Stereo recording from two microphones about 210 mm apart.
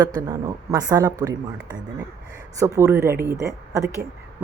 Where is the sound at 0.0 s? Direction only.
15° right (ahead or behind).